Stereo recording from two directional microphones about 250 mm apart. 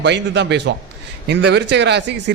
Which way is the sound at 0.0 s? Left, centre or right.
Right.